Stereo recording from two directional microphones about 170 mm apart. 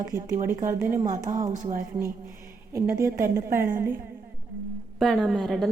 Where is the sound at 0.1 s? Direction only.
20° right (ahead or behind).